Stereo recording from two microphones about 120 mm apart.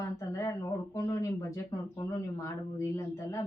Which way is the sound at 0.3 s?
25° left (ahead or behind).